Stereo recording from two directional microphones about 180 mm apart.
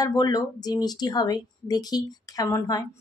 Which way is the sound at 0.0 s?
20° left (ahead or behind).